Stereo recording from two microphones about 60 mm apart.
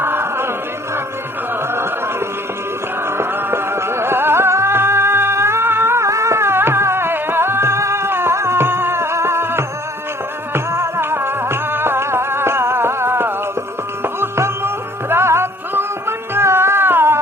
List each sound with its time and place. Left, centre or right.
0.0 s music: right
3.1 s music: right